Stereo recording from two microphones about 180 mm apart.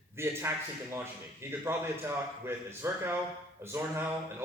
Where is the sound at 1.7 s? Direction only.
15° right (ahead or behind).